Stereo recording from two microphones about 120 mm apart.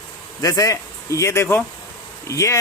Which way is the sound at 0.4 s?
30° left (ahead or behind).